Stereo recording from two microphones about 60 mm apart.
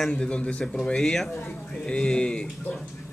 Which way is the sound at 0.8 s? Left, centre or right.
Centre.